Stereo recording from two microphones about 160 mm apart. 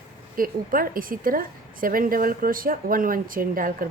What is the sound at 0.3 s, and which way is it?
A woman's voice, 60° right (ahead or behind).